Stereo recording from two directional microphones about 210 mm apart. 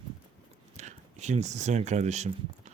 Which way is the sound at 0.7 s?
35° right (ahead or behind).